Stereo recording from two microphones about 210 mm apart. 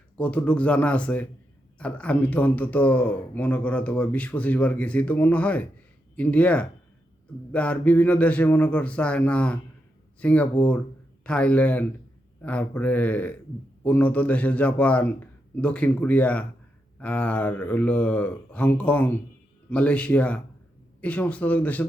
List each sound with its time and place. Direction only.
0.2 s a man's voice: 5° left (ahead or behind)